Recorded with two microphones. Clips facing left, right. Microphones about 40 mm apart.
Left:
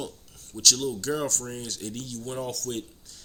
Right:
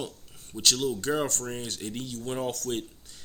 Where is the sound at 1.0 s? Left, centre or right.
Right.